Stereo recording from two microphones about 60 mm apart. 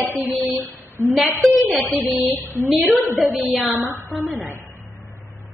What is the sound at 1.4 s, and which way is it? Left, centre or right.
A woman's voice, centre.